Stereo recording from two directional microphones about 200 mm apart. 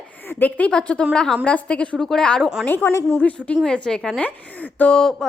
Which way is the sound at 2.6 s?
10° left (ahead or behind).